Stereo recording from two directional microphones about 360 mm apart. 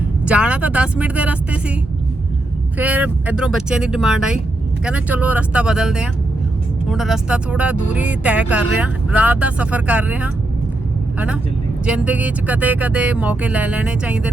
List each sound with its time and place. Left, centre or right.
0.3 s speech: centre
2.7 s speech: centre
11.9 s speech: centre